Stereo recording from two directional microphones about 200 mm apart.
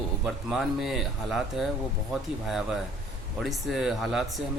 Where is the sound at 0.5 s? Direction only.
Centre (ahead or behind).